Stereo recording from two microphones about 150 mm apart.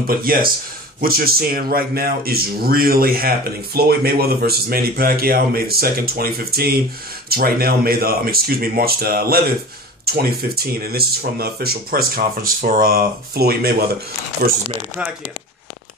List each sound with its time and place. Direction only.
0.1 s speech: 75° right (ahead or behind)
14.4 s speech: 80° right